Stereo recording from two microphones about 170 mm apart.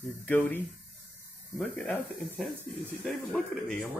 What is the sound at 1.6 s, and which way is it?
Speech, 5° left (ahead or behind).